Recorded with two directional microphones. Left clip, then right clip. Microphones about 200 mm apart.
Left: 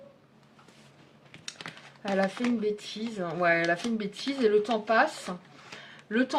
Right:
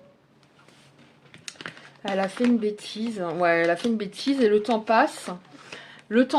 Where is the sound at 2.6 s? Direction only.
40° right (ahead or behind).